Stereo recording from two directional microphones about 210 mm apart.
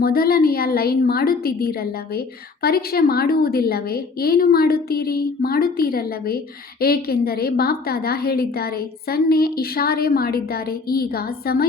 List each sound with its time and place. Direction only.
0.0 s a woman's voice: 45° left (ahead or behind)